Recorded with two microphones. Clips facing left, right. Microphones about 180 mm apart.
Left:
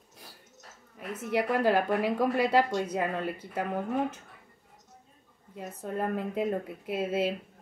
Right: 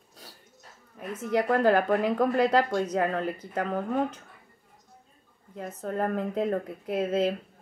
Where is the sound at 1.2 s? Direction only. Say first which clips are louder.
Right 3 dB; 10° left (ahead or behind).